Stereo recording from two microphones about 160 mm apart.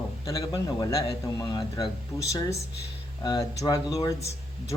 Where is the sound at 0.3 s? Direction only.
25° left (ahead or behind).